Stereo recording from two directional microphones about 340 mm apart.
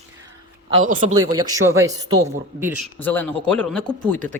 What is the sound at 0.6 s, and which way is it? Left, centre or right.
Speech, centre.